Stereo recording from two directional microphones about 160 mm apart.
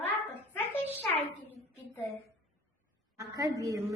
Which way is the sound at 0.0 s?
15° left (ahead or behind).